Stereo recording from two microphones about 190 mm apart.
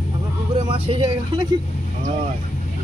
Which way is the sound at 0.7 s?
25° right (ahead or behind).